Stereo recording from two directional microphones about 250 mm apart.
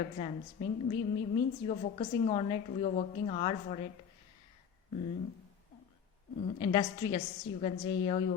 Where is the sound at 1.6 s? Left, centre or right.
Left.